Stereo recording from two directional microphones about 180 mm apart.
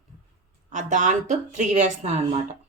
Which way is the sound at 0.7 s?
40° right (ahead or behind).